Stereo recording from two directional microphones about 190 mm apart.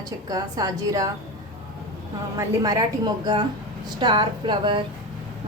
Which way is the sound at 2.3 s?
20° right (ahead or behind).